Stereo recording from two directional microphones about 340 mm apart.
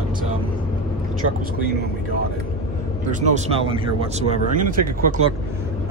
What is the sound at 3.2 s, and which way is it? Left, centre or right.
Speech, centre.